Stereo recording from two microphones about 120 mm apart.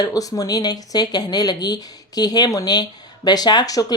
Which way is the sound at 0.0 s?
30° left (ahead or behind).